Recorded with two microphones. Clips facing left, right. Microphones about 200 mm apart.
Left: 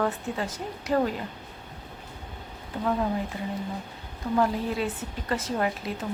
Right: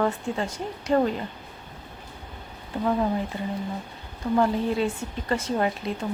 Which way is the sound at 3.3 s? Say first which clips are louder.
Right 2 dB; 30° right (ahead or behind).